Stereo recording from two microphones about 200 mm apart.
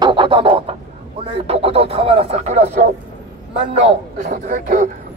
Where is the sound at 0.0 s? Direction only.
25° right (ahead or behind).